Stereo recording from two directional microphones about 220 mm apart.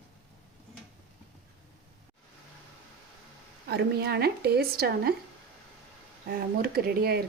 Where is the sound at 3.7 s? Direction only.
45° right (ahead or behind).